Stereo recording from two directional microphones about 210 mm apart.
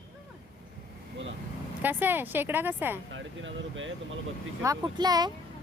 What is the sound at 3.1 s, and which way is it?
Speech, 65° right (ahead or behind).